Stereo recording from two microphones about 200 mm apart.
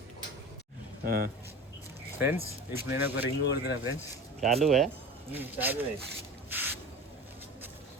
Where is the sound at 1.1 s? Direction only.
50° right (ahead or behind).